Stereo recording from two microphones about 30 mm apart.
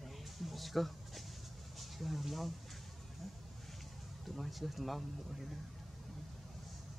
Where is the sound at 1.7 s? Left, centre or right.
Centre.